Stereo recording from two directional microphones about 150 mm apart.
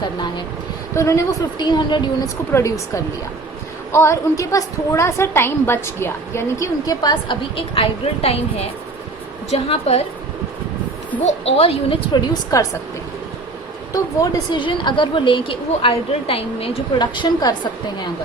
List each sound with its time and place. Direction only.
0.9 s a woman's voice: 20° left (ahead or behind)
1.6 s a woman's voice: 30° left (ahead or behind)
2.5 s a woman's voice: 20° left (ahead or behind); by 10.0 s 45° left (ahead or behind)
11.3 s a woman's voice: 40° left (ahead or behind)
12.3 s a woman's voice: 20° left (ahead or behind)
13.9 s a woman's voice: 25° left (ahead or behind)